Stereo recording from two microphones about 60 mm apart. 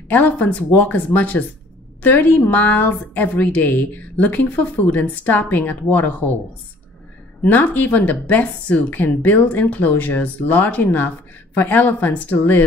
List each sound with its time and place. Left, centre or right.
0.1 s a woman's voice: left
7.4 s a woman's voice: left